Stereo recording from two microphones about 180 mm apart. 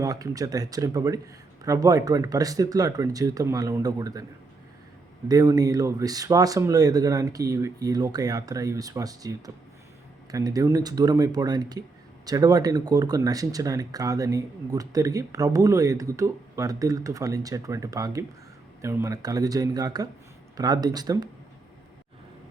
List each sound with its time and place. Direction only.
0.0 s speech: 20° right (ahead or behind)
5.3 s speech: 20° right (ahead or behind)
10.3 s speech: 20° right (ahead or behind)